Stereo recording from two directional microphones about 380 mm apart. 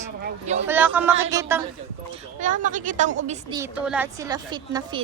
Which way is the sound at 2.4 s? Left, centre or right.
Centre.